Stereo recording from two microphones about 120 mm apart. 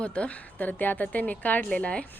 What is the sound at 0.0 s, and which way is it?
A woman's voice, 10° left (ahead or behind).